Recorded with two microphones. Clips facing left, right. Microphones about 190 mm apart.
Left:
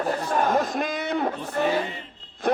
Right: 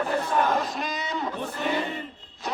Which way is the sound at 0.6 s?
50° left (ahead or behind).